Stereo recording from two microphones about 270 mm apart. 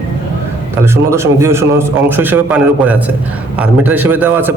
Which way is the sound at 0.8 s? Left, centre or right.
Centre.